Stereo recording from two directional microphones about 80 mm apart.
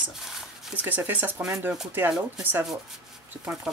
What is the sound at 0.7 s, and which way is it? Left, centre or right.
Speech, right.